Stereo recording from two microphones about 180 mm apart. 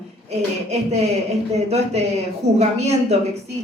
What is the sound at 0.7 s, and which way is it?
A man's voice, 35° right (ahead or behind).